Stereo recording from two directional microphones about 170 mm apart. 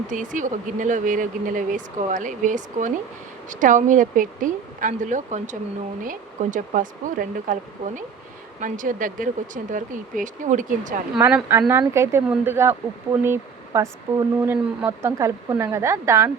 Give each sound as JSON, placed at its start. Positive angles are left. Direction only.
{"t": 0.1, "sound": "speech", "side_deg": -50}
{"t": 11.2, "sound": "a woman's voice", "side_deg": -10}